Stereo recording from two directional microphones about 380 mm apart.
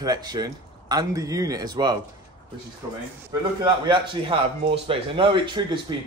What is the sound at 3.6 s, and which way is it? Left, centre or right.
A man's voice, centre.